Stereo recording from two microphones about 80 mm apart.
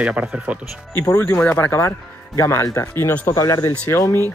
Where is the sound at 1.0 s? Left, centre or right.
Left.